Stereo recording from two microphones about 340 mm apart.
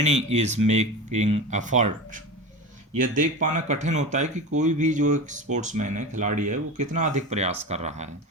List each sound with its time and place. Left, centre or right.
0.0 s speech: centre
3.4 s speech: right